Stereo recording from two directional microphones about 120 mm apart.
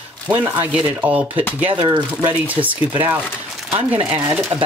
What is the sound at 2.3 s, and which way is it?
Speech, 15° right (ahead or behind).